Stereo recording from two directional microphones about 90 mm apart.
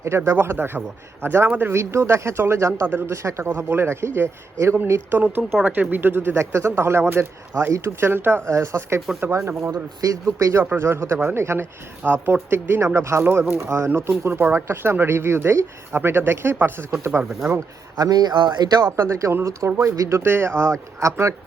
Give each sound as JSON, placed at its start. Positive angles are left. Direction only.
{"t": 0.3, "sound": "speech", "side_deg": -25}
{"t": 5.2, "sound": "speech", "side_deg": -20}
{"t": 17.5, "sound": "speech", "side_deg": -45}
{"t": 18.9, "sound": "speech", "side_deg": -30}